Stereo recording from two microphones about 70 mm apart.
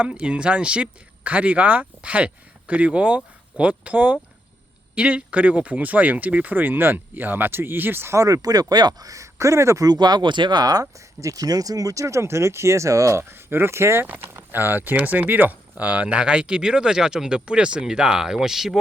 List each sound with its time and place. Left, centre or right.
0.0 s speech: centre
8.1 s speech: right
9.8 s speech: right; by 18.8 s centre